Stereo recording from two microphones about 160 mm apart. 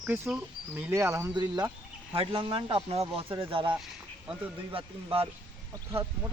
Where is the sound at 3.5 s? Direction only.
30° right (ahead or behind).